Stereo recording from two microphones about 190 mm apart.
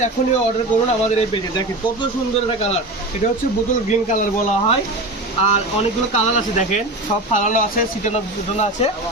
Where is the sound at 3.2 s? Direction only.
40° left (ahead or behind).